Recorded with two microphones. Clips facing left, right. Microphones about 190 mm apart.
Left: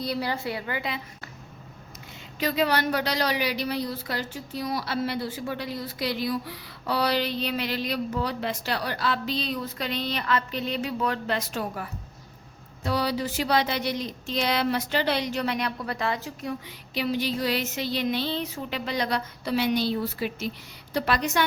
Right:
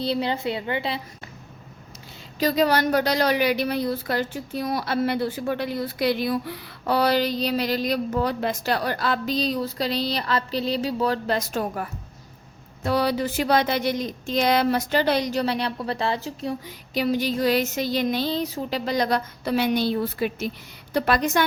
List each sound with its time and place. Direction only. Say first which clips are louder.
0.0 s a woman's voice: right 4 dB; 25° right (ahead or behind)
2.4 s a woman's voice: right 4 dB; 40° right (ahead or behind)
16.6 s a woman's voice: right 6 dB; 45° right (ahead or behind)